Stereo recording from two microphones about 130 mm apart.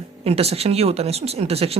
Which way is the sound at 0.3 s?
50° right (ahead or behind).